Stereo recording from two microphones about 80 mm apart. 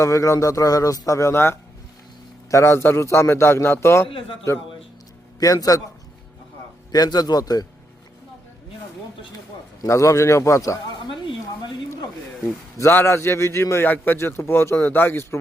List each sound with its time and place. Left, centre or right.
0.0 s a man's voice: left
5.4 s speech: left
6.9 s speech: left
9.8 s a man's voice: left
12.7 s a man's voice: left